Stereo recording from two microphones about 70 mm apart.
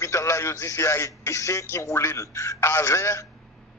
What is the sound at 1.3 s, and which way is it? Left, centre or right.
A man's voice, left.